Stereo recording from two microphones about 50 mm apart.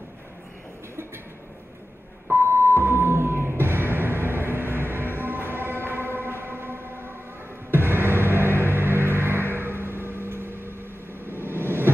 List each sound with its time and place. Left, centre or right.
2.3 s music: right
11.2 s vehicle: right